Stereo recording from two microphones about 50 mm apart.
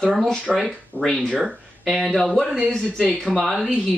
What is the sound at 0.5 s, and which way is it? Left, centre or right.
Speech, centre.